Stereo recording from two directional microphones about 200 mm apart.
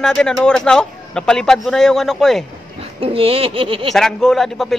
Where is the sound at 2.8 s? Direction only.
30° right (ahead or behind).